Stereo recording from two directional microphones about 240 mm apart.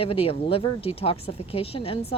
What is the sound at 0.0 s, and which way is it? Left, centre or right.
Speech, left.